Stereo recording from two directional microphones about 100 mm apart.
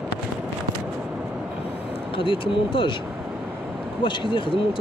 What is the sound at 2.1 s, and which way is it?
Speech, 60° left (ahead or behind).